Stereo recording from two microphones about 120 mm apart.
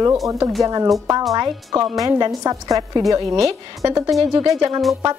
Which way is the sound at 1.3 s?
30° right (ahead or behind).